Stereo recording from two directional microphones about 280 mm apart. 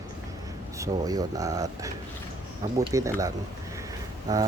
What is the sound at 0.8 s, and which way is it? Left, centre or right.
Speech, centre.